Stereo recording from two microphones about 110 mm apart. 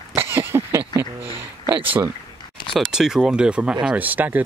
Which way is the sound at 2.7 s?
5° right (ahead or behind).